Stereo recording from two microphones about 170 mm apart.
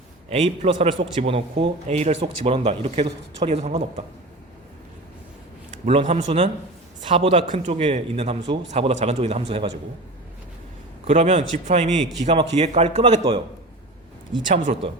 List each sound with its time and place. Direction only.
0.3 s speech: 40° right (ahead or behind)
5.7 s a sound: 45° right (ahead or behind)
6.1 s a man's voice: 45° right (ahead or behind)
11.0 s a man's voice: 40° right (ahead or behind)
14.4 s a man's voice: 45° right (ahead or behind)